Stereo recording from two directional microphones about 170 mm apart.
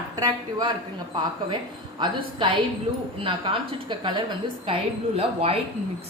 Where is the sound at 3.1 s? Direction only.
30° right (ahead or behind).